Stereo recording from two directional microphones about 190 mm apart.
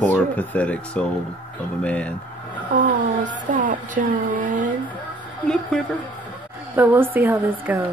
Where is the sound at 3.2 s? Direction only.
45° right (ahead or behind).